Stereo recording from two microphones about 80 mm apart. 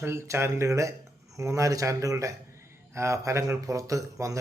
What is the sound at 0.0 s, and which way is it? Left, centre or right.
A man's voice, right.